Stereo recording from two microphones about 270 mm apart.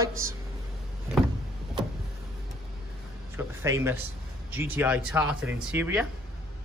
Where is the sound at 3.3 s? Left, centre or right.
Centre.